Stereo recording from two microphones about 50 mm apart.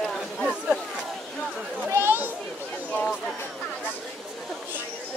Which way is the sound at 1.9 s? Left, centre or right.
Right.